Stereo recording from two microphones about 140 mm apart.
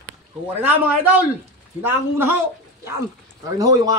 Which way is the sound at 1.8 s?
15° right (ahead or behind).